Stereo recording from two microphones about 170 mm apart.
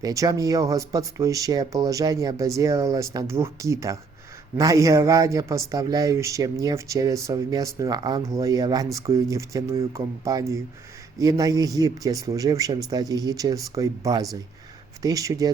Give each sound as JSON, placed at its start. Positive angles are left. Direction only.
{"t": 0.0, "sound": "speech", "side_deg": -20}